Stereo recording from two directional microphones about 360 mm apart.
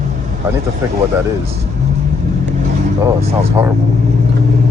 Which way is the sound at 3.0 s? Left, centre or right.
Centre.